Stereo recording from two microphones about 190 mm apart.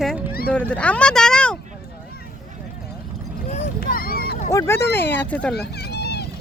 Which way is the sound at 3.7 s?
50° left (ahead or behind).